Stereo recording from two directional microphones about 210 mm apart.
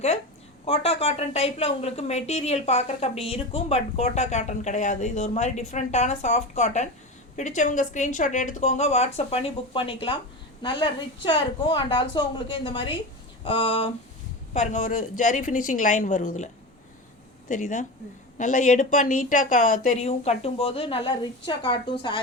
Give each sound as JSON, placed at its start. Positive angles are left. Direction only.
{"t": 0.6, "sound": "a woman's voice", "side_deg": 30}
{"t": 17.5, "sound": "a woman's voice", "side_deg": 35}